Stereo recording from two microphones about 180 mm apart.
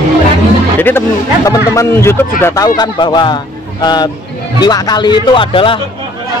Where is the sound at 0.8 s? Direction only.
10° left (ahead or behind); by 5.8 s 30° left (ahead or behind).